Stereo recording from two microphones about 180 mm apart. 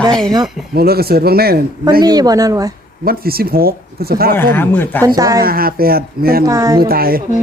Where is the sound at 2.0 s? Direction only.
20° right (ahead or behind).